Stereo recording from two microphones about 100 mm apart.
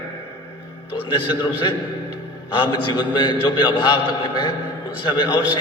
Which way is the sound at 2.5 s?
55° left (ahead or behind).